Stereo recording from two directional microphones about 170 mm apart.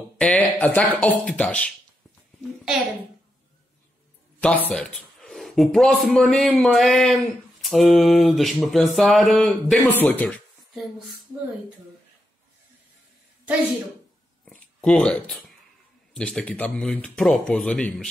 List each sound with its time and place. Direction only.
0.2 s speech: 10° left (ahead or behind)
4.4 s a man's voice: 10° left (ahead or behind)
14.4 s a sound: 10° left (ahead or behind)
16.1 s a man's voice: 5° left (ahead or behind)